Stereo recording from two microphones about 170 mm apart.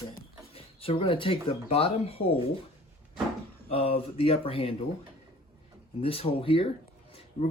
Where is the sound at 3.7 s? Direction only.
35° left (ahead or behind).